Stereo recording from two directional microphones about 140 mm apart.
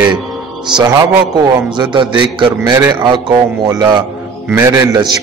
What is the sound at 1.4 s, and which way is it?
A man's voice, 35° right (ahead or behind).